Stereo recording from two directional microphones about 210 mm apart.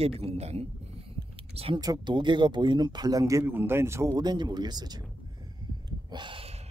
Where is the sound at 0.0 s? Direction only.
30° right (ahead or behind).